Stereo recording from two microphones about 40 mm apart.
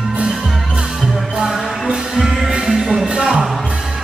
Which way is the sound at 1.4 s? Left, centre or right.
Centre.